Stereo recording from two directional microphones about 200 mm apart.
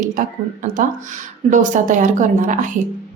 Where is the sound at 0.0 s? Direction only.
40° right (ahead or behind).